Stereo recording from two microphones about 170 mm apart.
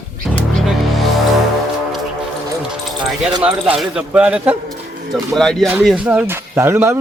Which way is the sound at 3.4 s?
5° right (ahead or behind).